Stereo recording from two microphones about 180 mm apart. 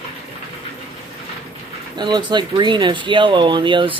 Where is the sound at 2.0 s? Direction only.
25° right (ahead or behind).